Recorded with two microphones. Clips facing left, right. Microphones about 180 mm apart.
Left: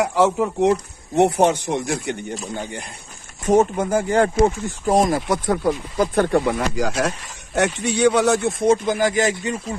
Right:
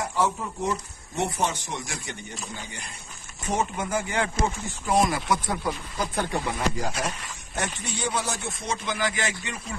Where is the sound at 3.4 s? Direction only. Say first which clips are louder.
Left 11 dB; 45° left (ahead or behind); by 7.1 s 85° left.